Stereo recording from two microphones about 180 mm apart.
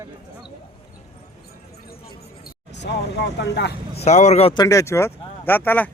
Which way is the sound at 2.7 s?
75° left (ahead or behind).